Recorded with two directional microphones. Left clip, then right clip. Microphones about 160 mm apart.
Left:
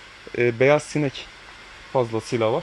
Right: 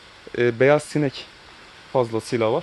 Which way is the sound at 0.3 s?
20° right (ahead or behind).